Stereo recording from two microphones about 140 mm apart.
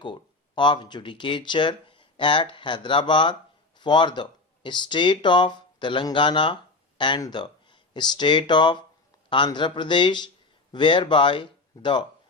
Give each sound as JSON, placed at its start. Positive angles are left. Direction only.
{"t": 0.0, "sound": "speech", "side_deg": 35}